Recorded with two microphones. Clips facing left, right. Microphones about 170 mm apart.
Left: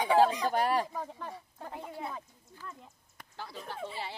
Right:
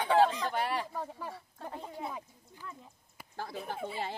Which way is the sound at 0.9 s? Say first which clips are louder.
Even; 5° right (ahead or behind).